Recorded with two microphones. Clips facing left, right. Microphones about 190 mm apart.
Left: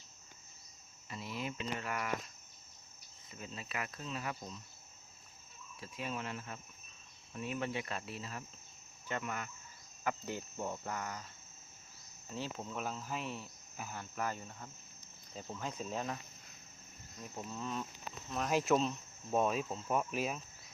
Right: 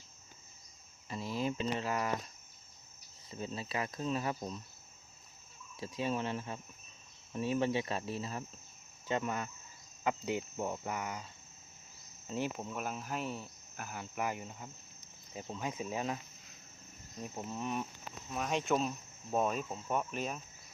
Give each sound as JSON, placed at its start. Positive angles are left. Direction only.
{"t": 1.1, "sound": "speech", "side_deg": -35}
{"t": 3.2, "sound": "speech", "side_deg": -30}
{"t": 5.8, "sound": "speech", "side_deg": -30}
{"t": 12.3, "sound": "speech", "side_deg": -15}
{"t": 14.0, "sound": "speech", "side_deg": -15}
{"t": 15.7, "sound": "speech", "side_deg": -10}
{"t": 17.3, "sound": "speech", "side_deg": -15}
{"t": 18.3, "sound": "speech", "side_deg": 0}